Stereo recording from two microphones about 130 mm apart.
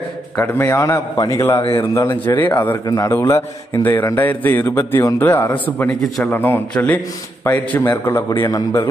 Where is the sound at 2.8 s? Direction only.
25° left (ahead or behind).